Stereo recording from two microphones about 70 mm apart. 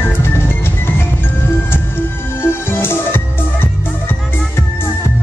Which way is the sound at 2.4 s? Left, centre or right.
Left.